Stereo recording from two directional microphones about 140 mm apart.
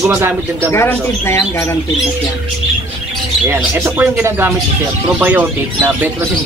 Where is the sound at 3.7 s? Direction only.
20° right (ahead or behind).